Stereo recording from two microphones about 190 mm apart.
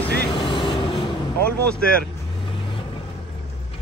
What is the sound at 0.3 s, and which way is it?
Vehicle, 25° left (ahead or behind).